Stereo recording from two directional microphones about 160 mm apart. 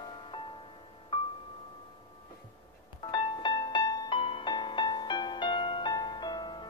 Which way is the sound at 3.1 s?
30° left (ahead or behind).